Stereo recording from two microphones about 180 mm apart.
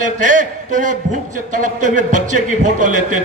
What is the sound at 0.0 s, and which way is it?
A man's voice, 45° right (ahead or behind).